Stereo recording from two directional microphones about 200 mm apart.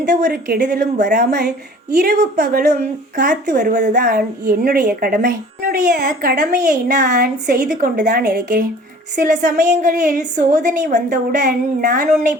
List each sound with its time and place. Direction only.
0.1 s a woman's voice: 50° right (ahead or behind)
2.0 s a woman's voice: 40° right (ahead or behind)